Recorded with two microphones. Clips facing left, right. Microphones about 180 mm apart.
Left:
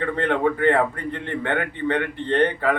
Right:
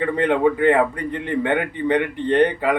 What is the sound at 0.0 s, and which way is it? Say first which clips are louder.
Speech: right 4 dB; 15° right (ahead or behind).